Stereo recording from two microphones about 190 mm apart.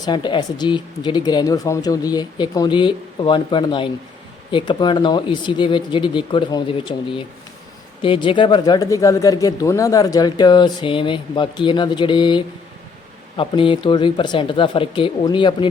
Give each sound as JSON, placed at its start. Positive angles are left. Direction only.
{"t": 0.0, "sound": "speech", "side_deg": 25}